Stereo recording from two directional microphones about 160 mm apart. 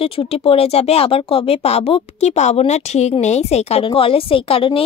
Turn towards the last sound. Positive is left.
turn(degrees=35)  # may be behind; listen again after turning